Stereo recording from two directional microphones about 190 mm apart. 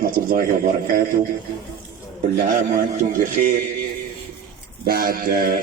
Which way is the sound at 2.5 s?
45° right (ahead or behind).